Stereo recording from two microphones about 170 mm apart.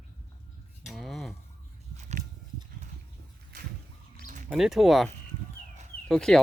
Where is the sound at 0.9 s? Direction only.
Centre (ahead or behind).